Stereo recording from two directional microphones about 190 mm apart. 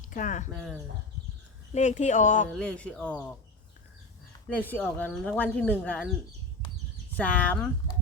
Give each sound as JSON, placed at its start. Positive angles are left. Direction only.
{"t": 0.0, "sound": "speech", "side_deg": 40}
{"t": 0.5, "sound": "speech", "side_deg": 0}
{"t": 1.7, "sound": "speech", "side_deg": 35}
{"t": 2.5, "sound": "speech", "side_deg": 5}
{"t": 4.7, "sound": "speech", "side_deg": 10}
{"t": 7.2, "sound": "speech", "side_deg": 10}